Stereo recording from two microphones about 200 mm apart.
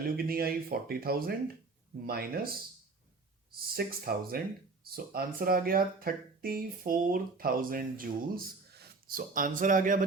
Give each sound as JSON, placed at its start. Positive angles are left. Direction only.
{"t": 0.2, "sound": "speech", "side_deg": -50}